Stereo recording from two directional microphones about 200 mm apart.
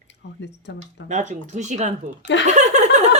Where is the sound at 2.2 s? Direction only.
65° left (ahead or behind).